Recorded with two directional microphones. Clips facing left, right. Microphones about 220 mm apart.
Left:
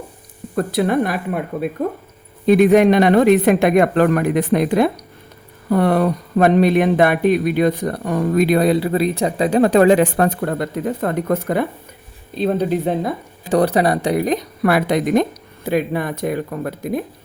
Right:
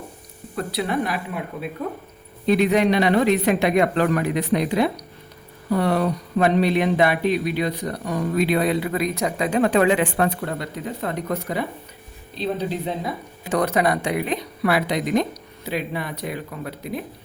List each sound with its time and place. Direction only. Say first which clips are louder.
0.5 s speech: left 7 dB; 50° left (ahead or behind)
13.5 s speech: left 5 dB; 35° left (ahead or behind)